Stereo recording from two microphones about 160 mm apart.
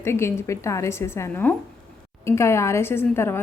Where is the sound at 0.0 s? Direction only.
15° left (ahead or behind).